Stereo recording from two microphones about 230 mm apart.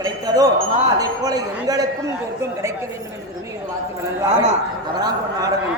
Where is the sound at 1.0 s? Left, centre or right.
Centre.